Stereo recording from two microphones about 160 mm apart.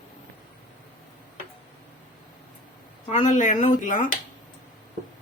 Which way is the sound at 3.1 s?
50° left (ahead or behind).